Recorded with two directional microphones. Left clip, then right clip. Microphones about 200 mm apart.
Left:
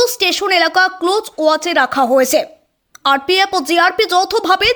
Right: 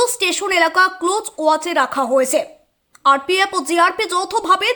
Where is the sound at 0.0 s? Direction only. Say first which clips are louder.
Left 3 dB; 15° left (ahead or behind).